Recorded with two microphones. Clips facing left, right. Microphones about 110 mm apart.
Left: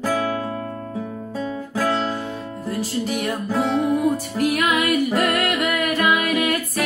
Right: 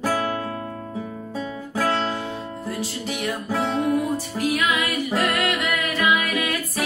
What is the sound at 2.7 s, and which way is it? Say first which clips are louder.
Music: left 8 dB; 45° left (ahead or behind).